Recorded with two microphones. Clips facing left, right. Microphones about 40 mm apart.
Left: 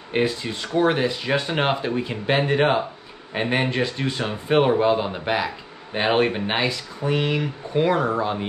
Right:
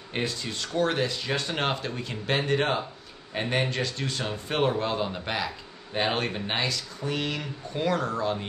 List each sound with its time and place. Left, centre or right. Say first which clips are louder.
0.1 s speech: left 8 dB; centre